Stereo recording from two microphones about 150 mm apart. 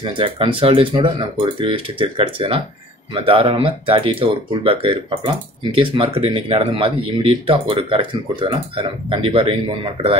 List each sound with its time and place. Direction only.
0.0 s speech: 35° right (ahead or behind)